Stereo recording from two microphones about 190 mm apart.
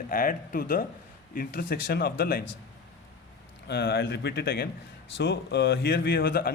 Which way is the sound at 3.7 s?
70° left (ahead or behind).